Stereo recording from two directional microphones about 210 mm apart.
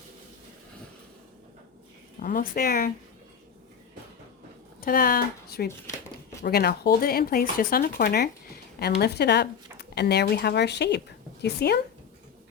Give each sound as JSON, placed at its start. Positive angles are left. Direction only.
{"t": 2.1, "sound": "speech", "side_deg": 40}
{"t": 4.8, "sound": "speech", "side_deg": 45}